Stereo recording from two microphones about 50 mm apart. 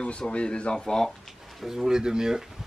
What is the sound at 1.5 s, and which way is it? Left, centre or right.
Speech, centre.